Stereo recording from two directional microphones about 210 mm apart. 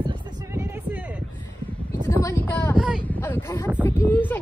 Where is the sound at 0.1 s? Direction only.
15° right (ahead or behind).